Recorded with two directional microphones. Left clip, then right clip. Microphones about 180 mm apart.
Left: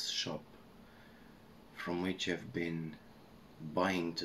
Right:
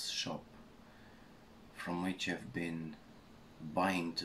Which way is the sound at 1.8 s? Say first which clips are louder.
Left 2 dB; 15° right (ahead or behind).